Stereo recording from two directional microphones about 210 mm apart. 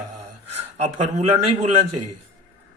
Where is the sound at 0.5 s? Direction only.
30° right (ahead or behind).